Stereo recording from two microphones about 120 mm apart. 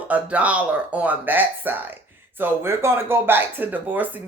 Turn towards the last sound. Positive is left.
turn(degrees=-15)  # may be behind; listen again after turning